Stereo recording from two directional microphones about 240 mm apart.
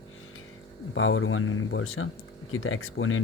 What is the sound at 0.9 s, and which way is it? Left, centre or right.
Speech, left.